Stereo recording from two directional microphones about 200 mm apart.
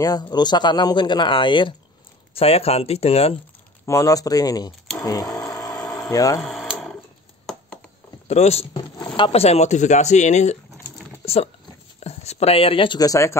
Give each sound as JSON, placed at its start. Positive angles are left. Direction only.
{"t": 0.0, "sound": "speech", "side_deg": 20}
{"t": 3.8, "sound": "speech", "side_deg": 15}
{"t": 5.4, "sound": "a sound", "side_deg": 15}
{"t": 6.0, "sound": "speech", "side_deg": 15}
{"t": 6.4, "sound": "sewing machine", "side_deg": 0}
{"t": 8.3, "sound": "speech", "side_deg": 30}
{"t": 11.2, "sound": "a sound", "side_deg": 30}
{"t": 12.0, "sound": "speech", "side_deg": 30}